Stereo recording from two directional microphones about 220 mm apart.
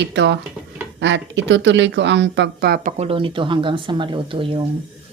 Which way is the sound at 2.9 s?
25° right (ahead or behind).